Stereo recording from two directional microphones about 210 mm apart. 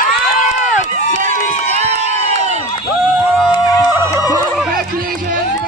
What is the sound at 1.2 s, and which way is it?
Run, 30° right (ahead or behind).